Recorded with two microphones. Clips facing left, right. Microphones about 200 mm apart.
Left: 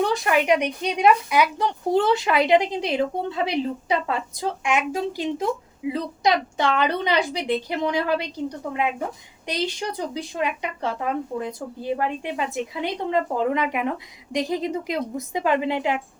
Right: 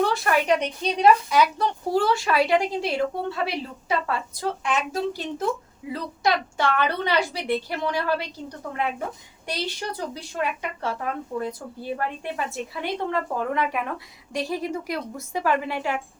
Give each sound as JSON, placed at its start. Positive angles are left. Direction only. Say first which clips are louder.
{"t": 0.0, "sound": "speech", "louder": "left 1 dB", "side_deg": 15}
{"t": 9.5, "sound": "a woman's voice", "louder": "left 3 dB", "side_deg": 15}